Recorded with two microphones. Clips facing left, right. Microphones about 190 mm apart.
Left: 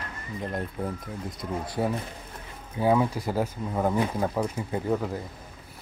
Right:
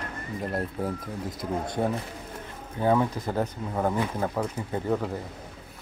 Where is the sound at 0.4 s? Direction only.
5° right (ahead or behind).